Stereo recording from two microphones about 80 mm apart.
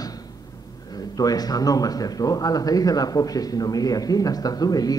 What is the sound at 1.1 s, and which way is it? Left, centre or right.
Speech, left.